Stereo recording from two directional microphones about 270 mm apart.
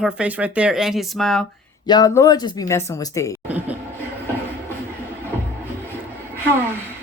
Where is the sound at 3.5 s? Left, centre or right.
Centre.